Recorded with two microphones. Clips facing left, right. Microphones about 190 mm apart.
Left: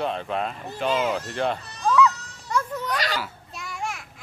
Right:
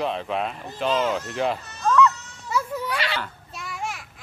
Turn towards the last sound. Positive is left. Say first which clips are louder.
# even
turn(degrees=0)  # may be behind; listen again after turning